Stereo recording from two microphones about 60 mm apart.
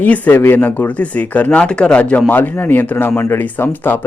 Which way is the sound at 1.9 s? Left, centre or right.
Left.